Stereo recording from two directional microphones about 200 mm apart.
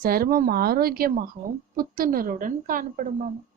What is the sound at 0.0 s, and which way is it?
Speech, 45° right (ahead or behind).